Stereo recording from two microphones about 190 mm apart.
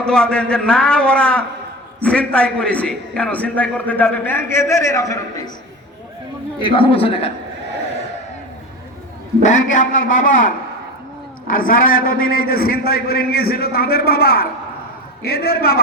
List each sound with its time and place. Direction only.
0.0 s a man's voice: 5° left (ahead or behind)
6.6 s a man's voice: 25° left (ahead or behind)
9.4 s a man's voice: 40° left (ahead or behind)